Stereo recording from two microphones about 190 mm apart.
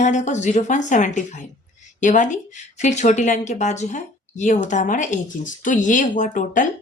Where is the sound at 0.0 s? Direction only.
40° left (ahead or behind).